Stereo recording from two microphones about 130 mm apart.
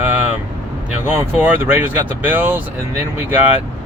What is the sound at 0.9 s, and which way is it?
Speech, 10° right (ahead or behind).